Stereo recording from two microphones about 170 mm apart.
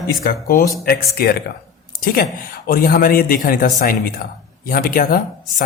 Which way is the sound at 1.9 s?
60° left (ahead or behind).